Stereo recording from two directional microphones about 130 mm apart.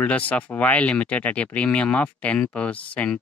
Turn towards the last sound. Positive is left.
turn(degrees=10)  # may be behind; listen again after turning